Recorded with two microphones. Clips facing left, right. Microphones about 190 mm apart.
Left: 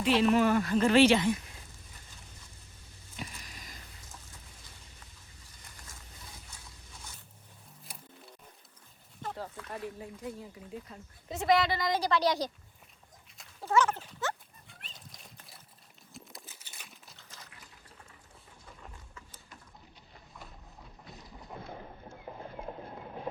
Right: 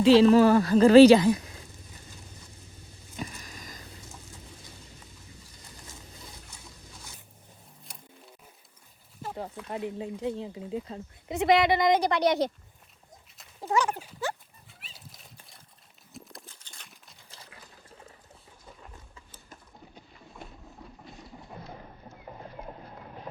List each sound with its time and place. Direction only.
0.2 s speech: 35° right (ahead or behind)
3.2 s a sound: 45° right (ahead or behind)
7.9 s music: centre (ahead or behind)
9.2 s speech: 15° right (ahead or behind)
10.4 s speech: 90° right
10.8 s speech: 25° right (ahead or behind)
13.6 s speech: 15° right (ahead or behind)
14.7 s dog: 5° right (ahead or behind)
16.1 s a sound: 5° left (ahead or behind)